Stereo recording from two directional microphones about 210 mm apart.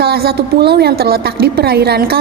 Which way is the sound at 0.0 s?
50° right (ahead or behind).